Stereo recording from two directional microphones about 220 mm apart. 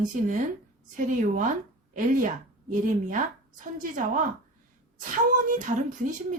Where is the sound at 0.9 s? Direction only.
35° right (ahead or behind).